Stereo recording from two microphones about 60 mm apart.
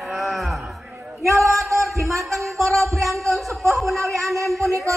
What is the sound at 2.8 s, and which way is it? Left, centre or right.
Speech, right.